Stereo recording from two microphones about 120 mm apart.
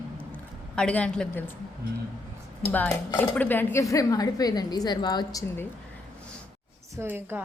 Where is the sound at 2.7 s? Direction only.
15° left (ahead or behind).